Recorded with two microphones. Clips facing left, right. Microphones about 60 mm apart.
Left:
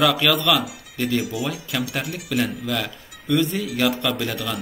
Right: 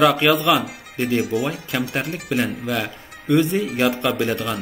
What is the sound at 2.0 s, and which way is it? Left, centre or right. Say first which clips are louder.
Speech: right 3 dB; right.